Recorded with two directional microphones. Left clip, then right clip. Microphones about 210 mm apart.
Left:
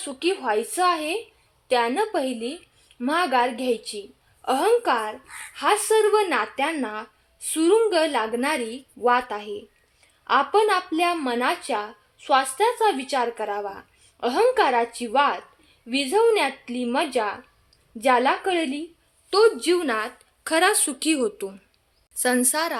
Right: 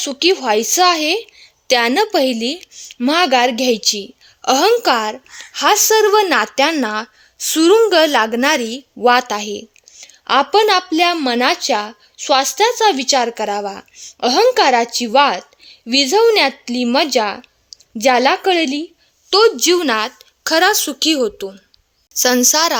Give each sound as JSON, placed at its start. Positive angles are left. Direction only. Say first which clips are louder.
{"t": 0.0, "sound": "a woman's voice", "louder": "right 10 dB", "side_deg": -55}
{"t": 20.4, "sound": "speech", "louder": "right 7 dB", "side_deg": -30}
{"t": 22.2, "sound": "a woman's voice", "louder": "right 10 dB", "side_deg": -35}